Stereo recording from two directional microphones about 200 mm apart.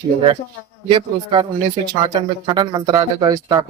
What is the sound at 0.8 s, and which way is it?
Speech, 25° right (ahead or behind).